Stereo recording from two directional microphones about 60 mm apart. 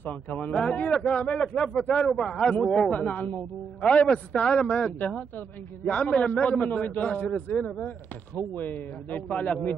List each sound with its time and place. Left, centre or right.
0.3 s a man's voice: centre
2.0 s a man's voice: centre
2.3 s a man's voice: centre
2.9 s a man's voice: centre
8.4 s a man's voice: left